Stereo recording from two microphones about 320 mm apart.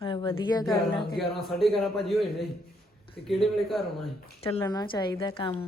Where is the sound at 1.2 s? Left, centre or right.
Centre.